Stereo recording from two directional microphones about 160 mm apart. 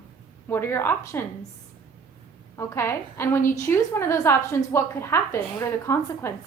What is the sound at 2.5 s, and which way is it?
A woman's voice, 15° left (ahead or behind).